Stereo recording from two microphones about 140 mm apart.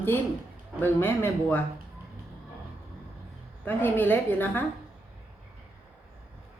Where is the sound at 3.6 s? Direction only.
15° left (ahead or behind).